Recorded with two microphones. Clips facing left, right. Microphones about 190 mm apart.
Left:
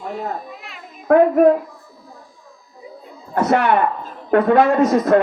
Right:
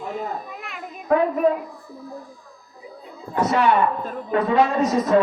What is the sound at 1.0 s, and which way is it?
Speech, 55° left (ahead or behind).